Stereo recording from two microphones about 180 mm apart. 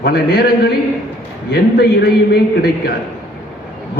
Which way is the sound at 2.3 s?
60° left (ahead or behind).